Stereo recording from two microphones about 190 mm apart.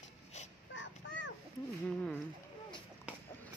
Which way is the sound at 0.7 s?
75° left (ahead or behind).